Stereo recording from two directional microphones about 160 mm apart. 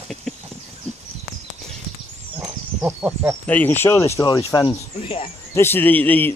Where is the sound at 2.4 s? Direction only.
10° right (ahead or behind).